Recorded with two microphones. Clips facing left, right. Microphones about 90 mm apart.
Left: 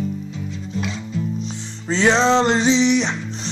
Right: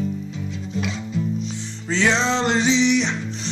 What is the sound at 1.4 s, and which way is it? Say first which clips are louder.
Music: even; 30° left (ahead or behind).